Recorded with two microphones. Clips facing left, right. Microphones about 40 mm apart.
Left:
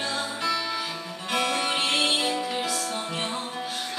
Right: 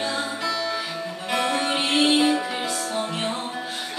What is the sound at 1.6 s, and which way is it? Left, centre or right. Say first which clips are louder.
Music: right 4 dB; centre.